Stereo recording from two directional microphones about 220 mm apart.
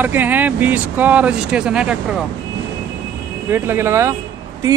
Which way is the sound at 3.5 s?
10° right (ahead or behind).